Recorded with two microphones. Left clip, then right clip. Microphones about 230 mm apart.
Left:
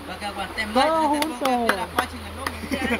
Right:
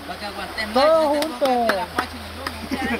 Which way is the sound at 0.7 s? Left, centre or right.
Right.